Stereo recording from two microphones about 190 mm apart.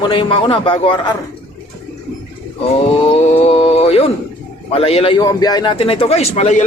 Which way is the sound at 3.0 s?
35° left (ahead or behind).